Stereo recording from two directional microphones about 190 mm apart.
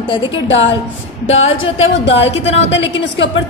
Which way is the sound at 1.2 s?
90° left.